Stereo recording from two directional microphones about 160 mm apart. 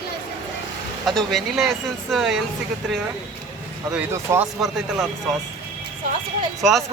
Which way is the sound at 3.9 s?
10° right (ahead or behind).